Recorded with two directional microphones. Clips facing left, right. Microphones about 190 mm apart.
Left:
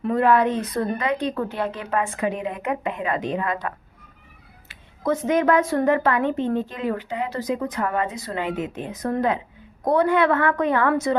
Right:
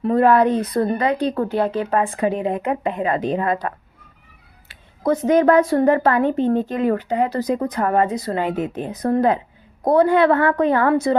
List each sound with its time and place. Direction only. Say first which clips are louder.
0.0 s a woman's voice: right 4 dB; 35° right (ahead or behind)
4.7 s a woman's voice: right 4 dB; 35° right (ahead or behind)